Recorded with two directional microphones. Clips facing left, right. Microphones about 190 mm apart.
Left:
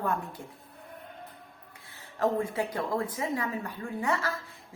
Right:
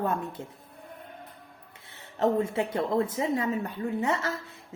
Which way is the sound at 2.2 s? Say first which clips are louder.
Right 3 dB; 25° right (ahead or behind).